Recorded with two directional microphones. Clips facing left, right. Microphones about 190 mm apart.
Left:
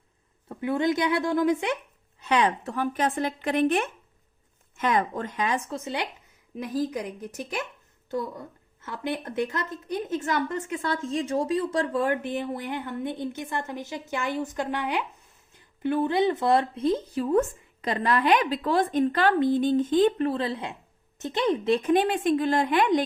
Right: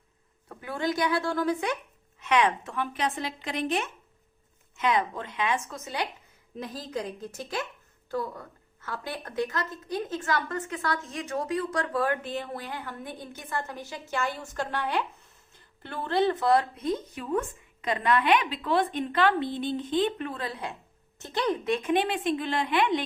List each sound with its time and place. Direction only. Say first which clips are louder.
0.4 s speech: left 6 dB; 20° left (ahead or behind)
2.2 s speech: left 1 dB; 35° left (ahead or behind)
6.6 s speech: left 6 dB; 15° left (ahead or behind); by 23.0 s 45° left (ahead or behind)